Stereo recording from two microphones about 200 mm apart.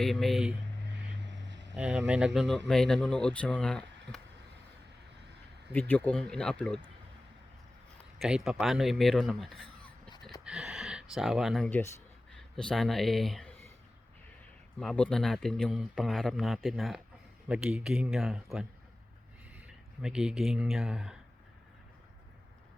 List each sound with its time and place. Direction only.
0.0 s a man's voice: centre (ahead or behind)
1.5 s vehicle: 65° right (ahead or behind)
1.7 s a man's voice: 5° right (ahead or behind)
5.7 s a man's voice: 10° left (ahead or behind)
8.2 s a man's voice: centre (ahead or behind)
14.8 s a man's voice: 5° left (ahead or behind)